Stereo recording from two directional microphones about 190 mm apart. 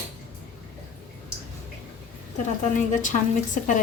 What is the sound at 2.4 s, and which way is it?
A woman's voice, 40° left (ahead or behind).